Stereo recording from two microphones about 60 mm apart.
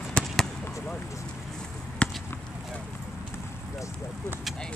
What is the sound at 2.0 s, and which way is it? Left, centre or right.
Basketball bounce, left.